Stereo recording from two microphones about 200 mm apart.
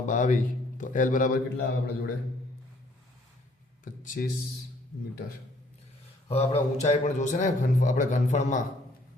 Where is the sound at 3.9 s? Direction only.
40° left (ahead or behind).